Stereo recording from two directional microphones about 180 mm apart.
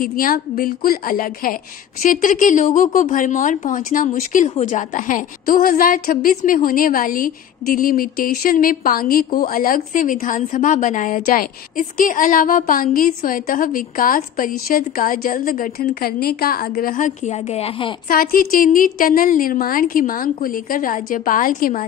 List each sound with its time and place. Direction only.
0.0 s a woman's voice: 50° left (ahead or behind); by 17.9 s 30° left (ahead or behind)
18.0 s a woman's voice: 50° left (ahead or behind)